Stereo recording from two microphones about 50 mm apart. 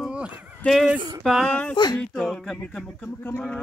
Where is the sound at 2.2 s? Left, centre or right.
Centre.